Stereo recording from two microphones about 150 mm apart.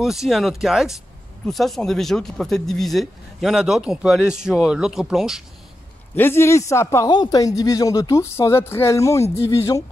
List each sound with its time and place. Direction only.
0.0 s speech: centre (ahead or behind)
6.1 s a man's voice: 15° left (ahead or behind)